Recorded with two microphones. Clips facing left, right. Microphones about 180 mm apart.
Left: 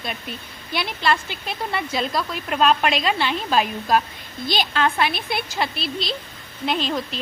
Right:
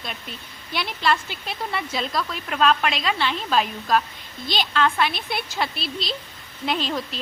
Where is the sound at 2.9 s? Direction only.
50° left (ahead or behind).